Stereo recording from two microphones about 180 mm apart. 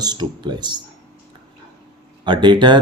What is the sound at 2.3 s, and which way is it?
Speech, 25° right (ahead or behind).